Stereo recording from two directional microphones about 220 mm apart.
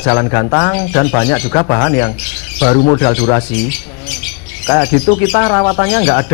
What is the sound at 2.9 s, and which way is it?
Speech, 10° left (ahead or behind).